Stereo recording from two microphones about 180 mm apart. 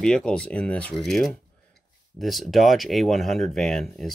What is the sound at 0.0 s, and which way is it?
Speech, 5° left (ahead or behind).